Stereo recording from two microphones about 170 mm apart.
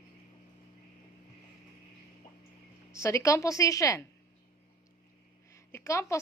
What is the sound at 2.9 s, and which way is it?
A woman's voice, 15° left (ahead or behind).